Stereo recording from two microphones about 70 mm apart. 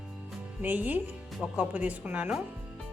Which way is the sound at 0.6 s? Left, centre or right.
Right.